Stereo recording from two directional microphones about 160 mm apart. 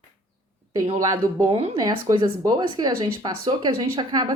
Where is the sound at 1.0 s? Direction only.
20° right (ahead or behind).